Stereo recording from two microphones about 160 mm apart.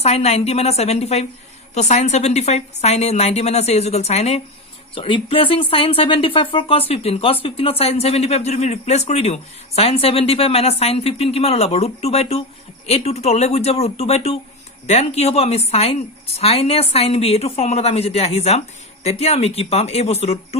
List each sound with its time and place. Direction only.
0.0 s a woman's voice: 40° left (ahead or behind)